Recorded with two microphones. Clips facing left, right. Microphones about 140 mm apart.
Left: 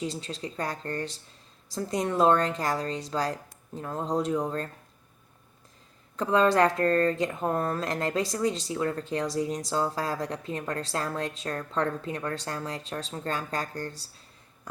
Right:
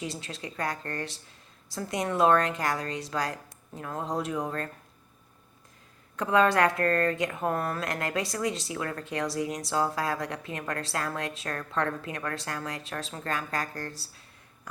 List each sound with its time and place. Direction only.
0.0 s a woman's voice: 30° left (ahead or behind)
6.1 s a woman's voice: 30° left (ahead or behind)